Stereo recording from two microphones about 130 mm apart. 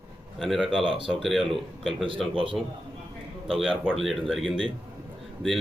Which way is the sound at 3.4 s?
5° left (ahead or behind).